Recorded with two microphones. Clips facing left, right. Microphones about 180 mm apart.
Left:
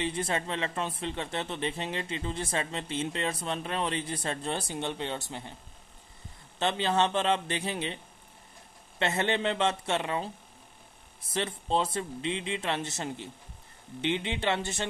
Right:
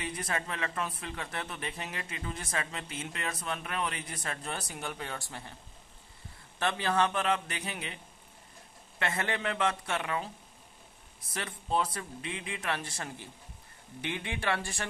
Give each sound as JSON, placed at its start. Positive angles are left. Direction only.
{"t": 0.0, "sound": "a man's voice", "side_deg": 25}
{"t": 6.6, "sound": "a man's voice", "side_deg": 25}
{"t": 9.0, "sound": "a man's voice", "side_deg": 25}